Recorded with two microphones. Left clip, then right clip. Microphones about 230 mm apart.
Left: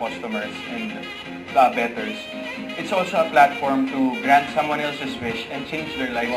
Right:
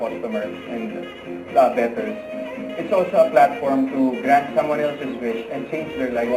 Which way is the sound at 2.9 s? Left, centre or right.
Left.